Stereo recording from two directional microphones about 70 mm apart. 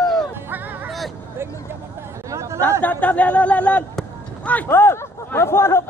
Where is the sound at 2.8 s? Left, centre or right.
Left.